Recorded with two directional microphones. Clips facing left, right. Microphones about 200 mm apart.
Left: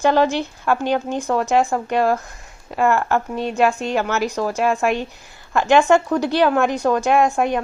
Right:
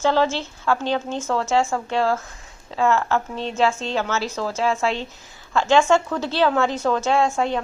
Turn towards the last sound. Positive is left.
turn(degrees=15)  # may be behind; listen again after turning